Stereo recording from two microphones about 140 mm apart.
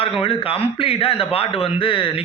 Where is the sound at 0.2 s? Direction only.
40° left (ahead or behind).